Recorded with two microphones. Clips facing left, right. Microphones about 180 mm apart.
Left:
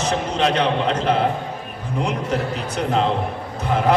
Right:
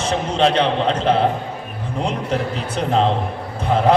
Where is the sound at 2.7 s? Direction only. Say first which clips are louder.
Right 2 dB; 30° right (ahead or behind).